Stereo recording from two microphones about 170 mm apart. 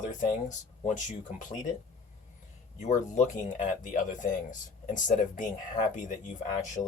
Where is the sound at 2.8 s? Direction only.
45° left (ahead or behind).